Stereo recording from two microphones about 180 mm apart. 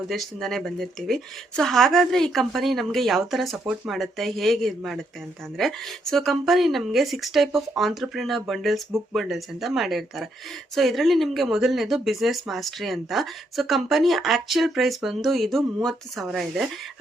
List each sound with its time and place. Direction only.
0.1 s speech: centre (ahead or behind)